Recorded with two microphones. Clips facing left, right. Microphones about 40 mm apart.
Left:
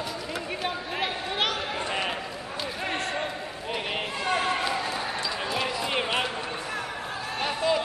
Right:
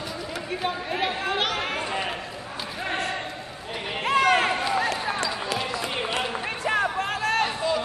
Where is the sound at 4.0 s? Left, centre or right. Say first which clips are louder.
Right 10 dB; right.